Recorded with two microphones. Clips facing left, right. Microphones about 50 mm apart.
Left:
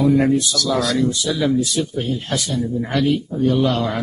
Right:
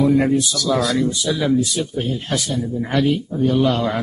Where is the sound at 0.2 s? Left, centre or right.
Centre.